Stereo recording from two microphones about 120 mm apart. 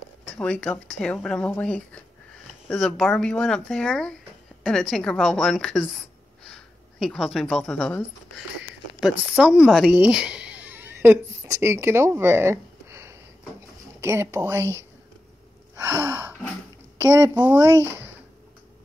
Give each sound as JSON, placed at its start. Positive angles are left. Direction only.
{"t": 0.4, "sound": "speech", "side_deg": 10}
{"t": 3.2, "sound": "a woman's voice", "side_deg": 5}
{"t": 9.0, "sound": "a woman's voice", "side_deg": -10}
{"t": 15.8, "sound": "gasp", "side_deg": -25}
{"t": 17.0, "sound": "a woman's voice", "side_deg": -20}